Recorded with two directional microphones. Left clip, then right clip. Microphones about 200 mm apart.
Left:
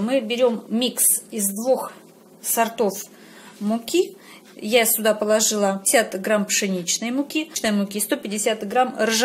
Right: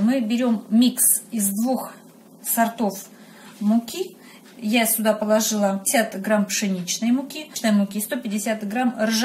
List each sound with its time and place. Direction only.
0.1 s a woman's voice: 40° left (ahead or behind)
2.5 s speech: 50° left (ahead or behind)